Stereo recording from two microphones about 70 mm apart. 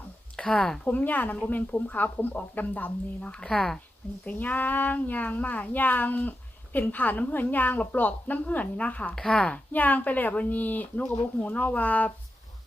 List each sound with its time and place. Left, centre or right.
0.3 s speech: centre
0.9 s a woman's voice: left; by 3.8 s centre
4.3 s a woman's voice: left
9.1 s speech: centre
9.7 s a woman's voice: left